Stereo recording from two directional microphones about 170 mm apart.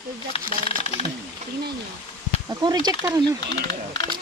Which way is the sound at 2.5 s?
25° right (ahead or behind).